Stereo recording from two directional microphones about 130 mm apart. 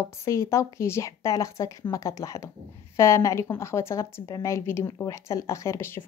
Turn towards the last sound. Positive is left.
turn(degrees=20)  # may be behind; listen again after turning